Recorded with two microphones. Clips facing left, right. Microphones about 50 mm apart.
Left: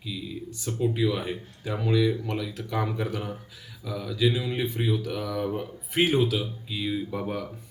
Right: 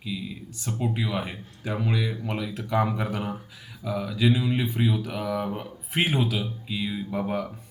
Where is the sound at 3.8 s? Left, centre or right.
Centre.